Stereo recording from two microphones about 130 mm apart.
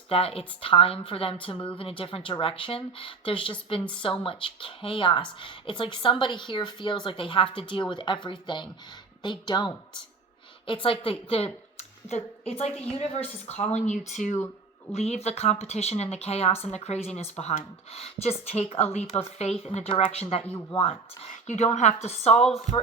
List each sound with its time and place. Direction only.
0.1 s a woman's voice: 45° left (ahead or behind)
10.8 s a woman's voice: 45° left (ahead or behind); by 14.3 s 70° left (ahead or behind)
14.9 s a woman's voice: 55° left (ahead or behind)
21.4 s speech: 60° left (ahead or behind)